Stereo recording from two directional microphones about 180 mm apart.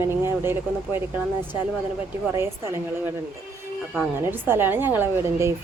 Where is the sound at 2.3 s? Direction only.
15° right (ahead or behind).